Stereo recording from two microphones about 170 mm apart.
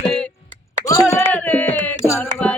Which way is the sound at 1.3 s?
10° left (ahead or behind).